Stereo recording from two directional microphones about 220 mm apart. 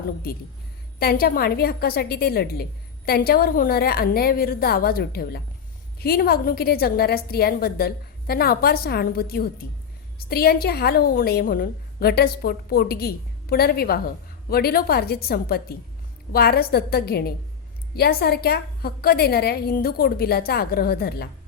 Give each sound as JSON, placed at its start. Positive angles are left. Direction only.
{"t": 0.9, "sound": "a woman's voice", "side_deg": 45}